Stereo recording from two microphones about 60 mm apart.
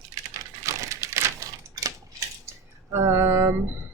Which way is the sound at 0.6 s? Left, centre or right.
Right.